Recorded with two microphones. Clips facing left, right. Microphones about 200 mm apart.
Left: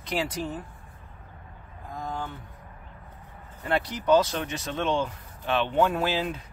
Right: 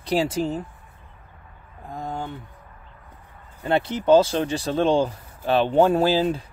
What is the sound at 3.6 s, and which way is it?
Speech, 25° right (ahead or behind).